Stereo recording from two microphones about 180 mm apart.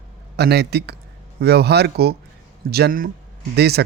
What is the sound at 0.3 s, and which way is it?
A man's voice, 65° right (ahead or behind).